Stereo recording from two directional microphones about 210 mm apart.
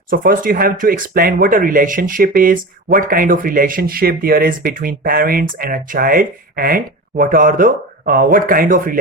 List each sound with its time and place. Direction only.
0.1 s speech: 40° right (ahead or behind)